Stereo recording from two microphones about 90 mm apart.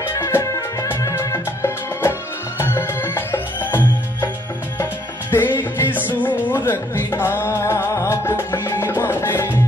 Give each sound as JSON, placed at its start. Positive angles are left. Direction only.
{"t": 0.0, "sound": "music", "side_deg": 30}
{"t": 5.3, "sound": "music", "side_deg": 25}